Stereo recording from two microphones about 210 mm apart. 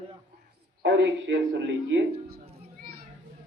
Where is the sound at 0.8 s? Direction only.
60° right (ahead or behind).